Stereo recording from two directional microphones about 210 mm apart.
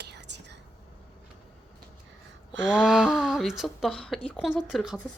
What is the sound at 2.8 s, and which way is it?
Speech, centre (ahead or behind).